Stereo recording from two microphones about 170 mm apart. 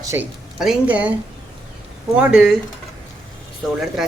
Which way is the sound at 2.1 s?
5° right (ahead or behind).